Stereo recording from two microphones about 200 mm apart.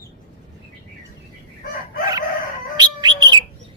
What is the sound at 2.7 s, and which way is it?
Bird, 20° right (ahead or behind).